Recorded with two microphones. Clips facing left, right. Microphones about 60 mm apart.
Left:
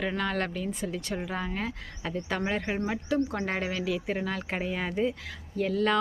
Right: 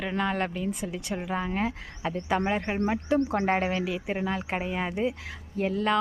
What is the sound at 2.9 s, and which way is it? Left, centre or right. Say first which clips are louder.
Speech: right 5 dB; right.